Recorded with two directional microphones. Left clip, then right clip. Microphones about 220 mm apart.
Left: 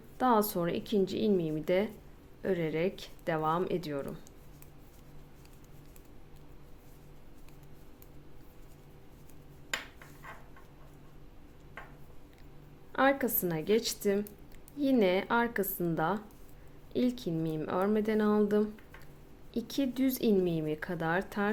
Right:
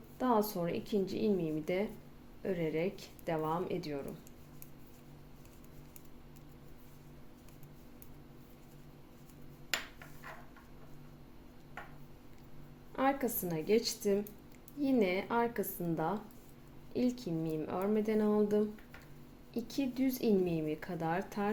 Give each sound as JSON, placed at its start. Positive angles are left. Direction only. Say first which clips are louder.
{"t": 0.2, "sound": "speech", "louder": "left 4 dB", "side_deg": 25}
{"t": 13.0, "sound": "speech", "louder": "left 5 dB", "side_deg": 20}